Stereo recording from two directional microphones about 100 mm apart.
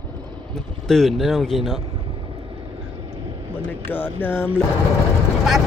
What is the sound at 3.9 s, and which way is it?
Speech, 20° left (ahead or behind).